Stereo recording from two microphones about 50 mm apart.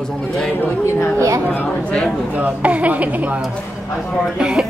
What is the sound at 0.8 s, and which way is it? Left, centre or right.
Speech, left.